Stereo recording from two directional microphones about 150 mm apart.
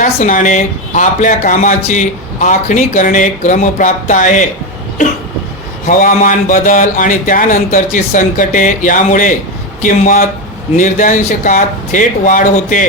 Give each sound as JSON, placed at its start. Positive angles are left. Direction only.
{"t": 0.0, "sound": "speech", "side_deg": 55}
{"t": 5.9, "sound": "speech", "side_deg": 60}